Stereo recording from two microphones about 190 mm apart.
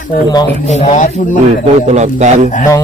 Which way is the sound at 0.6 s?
35° left (ahead or behind).